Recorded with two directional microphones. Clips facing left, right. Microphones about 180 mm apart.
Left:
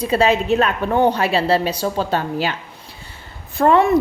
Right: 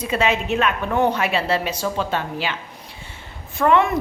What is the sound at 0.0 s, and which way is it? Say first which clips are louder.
A woman's voice: left 4 dB; 35° left (ahead or behind).